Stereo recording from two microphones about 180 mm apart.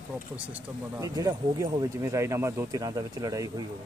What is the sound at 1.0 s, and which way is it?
Speech, 20° right (ahead or behind).